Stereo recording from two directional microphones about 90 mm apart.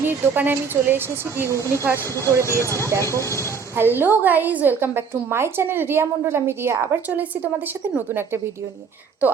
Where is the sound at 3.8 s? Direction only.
25° right (ahead or behind).